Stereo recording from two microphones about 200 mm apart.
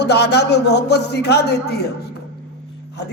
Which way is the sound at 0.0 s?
55° left (ahead or behind).